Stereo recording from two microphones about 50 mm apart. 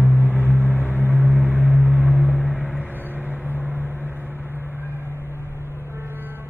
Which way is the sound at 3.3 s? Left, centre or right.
Right.